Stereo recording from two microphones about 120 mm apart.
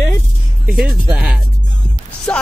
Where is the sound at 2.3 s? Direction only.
10° left (ahead or behind).